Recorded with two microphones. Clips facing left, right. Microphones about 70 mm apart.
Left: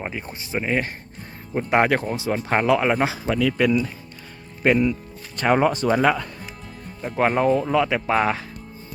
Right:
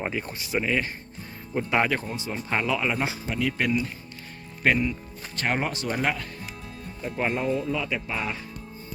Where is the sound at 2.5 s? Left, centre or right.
Left.